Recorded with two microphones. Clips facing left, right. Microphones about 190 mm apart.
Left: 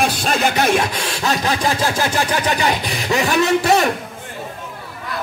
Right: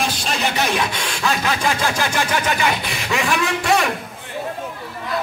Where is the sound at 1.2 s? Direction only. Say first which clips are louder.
Left 1 dB; 35° left (ahead or behind).